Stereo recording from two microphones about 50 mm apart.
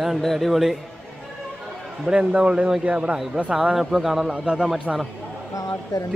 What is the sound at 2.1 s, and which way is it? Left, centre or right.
A man's voice, right.